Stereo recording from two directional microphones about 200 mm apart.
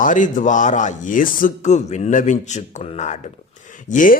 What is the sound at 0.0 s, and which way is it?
A man's voice, 40° left (ahead or behind).